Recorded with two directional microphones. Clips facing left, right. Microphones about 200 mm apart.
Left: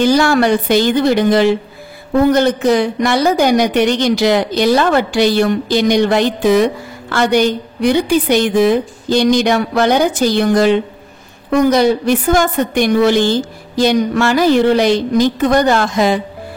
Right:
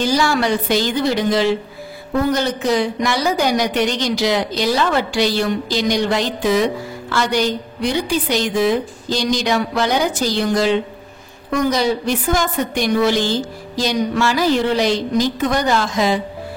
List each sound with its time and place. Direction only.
0.0 s a woman's voice: 55° left (ahead or behind)